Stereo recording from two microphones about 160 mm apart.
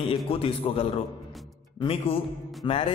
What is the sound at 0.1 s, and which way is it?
A man's voice, 35° left (ahead or behind).